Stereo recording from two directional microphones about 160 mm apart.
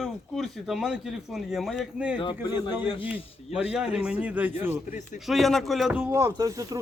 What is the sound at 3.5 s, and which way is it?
Speech, 5° right (ahead or behind).